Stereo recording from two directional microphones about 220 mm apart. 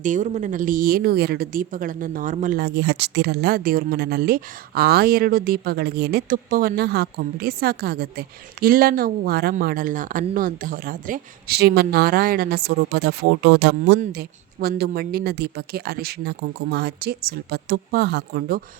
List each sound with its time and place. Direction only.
0.0 s a woman's voice: 35° right (ahead or behind)